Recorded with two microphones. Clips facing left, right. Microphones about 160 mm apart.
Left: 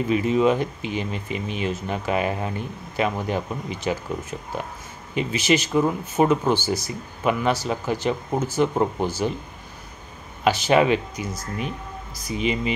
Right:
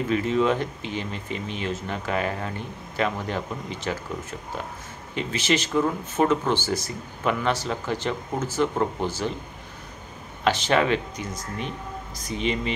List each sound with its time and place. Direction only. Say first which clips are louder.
0.1 s speech: left 3 dB; 15° left (ahead or behind)
10.4 s speech: left 3 dB; 10° left (ahead or behind)